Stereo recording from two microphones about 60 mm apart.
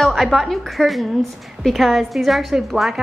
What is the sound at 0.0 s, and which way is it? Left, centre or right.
A woman's voice, centre.